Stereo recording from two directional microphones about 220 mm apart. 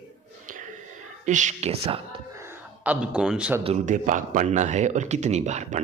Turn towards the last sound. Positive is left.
turn(degrees=-30)  # may be behind; listen again after turning